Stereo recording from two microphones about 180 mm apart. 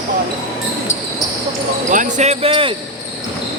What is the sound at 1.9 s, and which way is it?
Speech, 45° right (ahead or behind).